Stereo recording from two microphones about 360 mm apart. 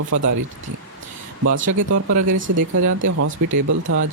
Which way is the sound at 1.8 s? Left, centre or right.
Right.